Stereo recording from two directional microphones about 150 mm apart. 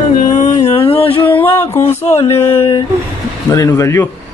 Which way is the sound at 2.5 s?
20° left (ahead or behind).